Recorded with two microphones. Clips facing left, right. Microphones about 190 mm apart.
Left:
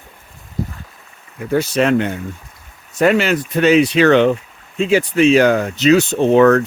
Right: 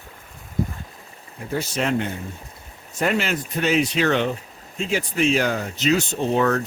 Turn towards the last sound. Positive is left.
turn(degrees=80)